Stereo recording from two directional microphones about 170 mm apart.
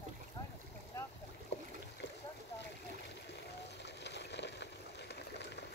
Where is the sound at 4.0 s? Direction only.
90° left.